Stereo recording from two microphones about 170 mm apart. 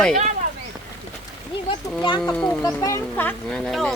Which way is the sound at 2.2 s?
5° left (ahead or behind).